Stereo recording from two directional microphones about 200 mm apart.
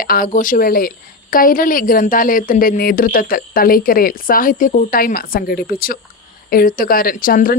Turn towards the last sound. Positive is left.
turn(degrees=45)  # may be behind; listen again after turning